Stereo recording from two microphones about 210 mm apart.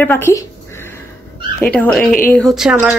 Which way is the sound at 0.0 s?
10° left (ahead or behind).